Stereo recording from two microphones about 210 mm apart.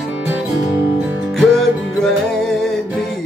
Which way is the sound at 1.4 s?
Centre (ahead or behind).